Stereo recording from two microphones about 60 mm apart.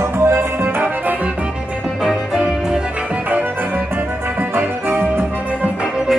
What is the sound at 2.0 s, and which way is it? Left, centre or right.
Music, centre.